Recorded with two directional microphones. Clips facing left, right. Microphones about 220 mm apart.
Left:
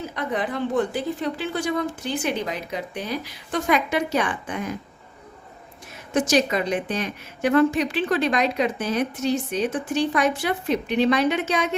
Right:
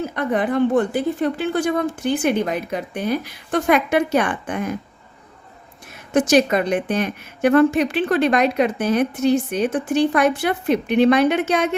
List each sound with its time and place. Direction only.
0.0 s a woman's voice: 55° right (ahead or behind)
6.1 s a woman's voice: 55° right (ahead or behind)